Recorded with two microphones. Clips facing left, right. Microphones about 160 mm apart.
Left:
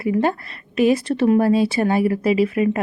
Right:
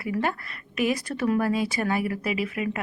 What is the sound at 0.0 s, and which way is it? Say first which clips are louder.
A woman's voice: left 8 dB; 25° left (ahead or behind).